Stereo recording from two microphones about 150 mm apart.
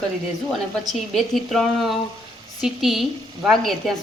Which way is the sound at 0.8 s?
Centre (ahead or behind).